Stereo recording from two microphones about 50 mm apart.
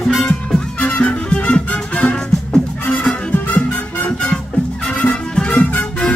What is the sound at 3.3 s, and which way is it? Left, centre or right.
Music, left.